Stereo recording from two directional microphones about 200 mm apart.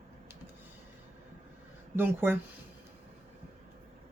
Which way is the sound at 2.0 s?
10° right (ahead or behind).